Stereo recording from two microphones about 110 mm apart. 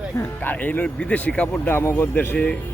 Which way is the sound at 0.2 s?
15° left (ahead or behind).